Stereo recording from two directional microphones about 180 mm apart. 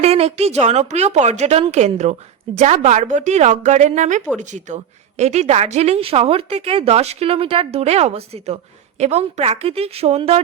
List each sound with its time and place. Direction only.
0.0 s a woman's voice: 35° right (ahead or behind)